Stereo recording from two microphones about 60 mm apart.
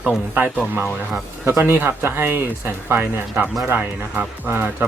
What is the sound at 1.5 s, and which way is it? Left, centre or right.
Speech, right.